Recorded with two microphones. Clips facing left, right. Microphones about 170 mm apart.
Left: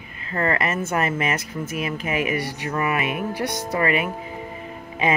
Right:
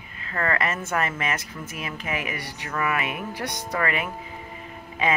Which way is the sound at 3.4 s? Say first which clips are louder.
Left 4 dB; 10° left (ahead or behind).